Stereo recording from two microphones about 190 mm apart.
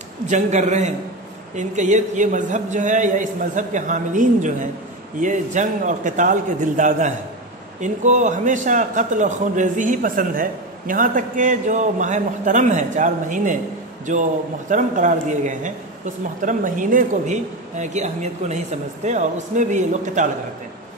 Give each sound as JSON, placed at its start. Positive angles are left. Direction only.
{"t": 0.3, "sound": "a man's voice", "side_deg": -40}
{"t": 14.7, "sound": "a man's voice", "side_deg": -40}